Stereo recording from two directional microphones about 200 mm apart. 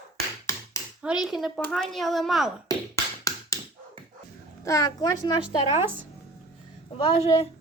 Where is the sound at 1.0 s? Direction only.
5° right (ahead or behind).